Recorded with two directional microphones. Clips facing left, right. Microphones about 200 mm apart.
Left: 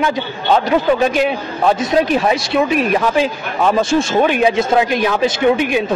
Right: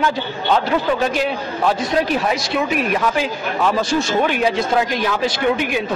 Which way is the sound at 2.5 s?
30° left (ahead or behind).